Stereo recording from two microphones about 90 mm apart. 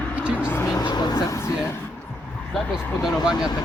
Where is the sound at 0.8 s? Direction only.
55° left (ahead or behind).